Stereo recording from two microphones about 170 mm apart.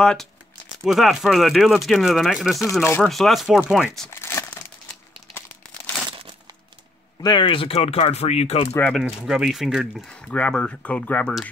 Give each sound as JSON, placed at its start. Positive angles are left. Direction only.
{"t": 0.0, "sound": "speech", "side_deg": 5}
{"t": 2.8, "sound": "speech", "side_deg": 15}
{"t": 3.1, "sound": "speech", "side_deg": 0}
{"t": 4.1, "sound": "crumpling", "side_deg": 15}
{"t": 7.2, "sound": "speech", "side_deg": 25}
{"t": 8.7, "sound": "speech", "side_deg": 10}
{"t": 9.2, "sound": "speech", "side_deg": -5}